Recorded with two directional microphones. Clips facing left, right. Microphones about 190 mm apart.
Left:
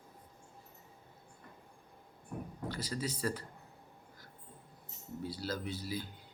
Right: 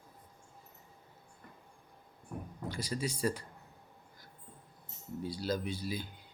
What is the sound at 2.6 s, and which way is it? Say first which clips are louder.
Speech: right 2 dB; 15° right (ahead or behind).